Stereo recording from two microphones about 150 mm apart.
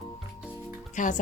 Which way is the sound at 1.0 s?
55° left (ahead or behind).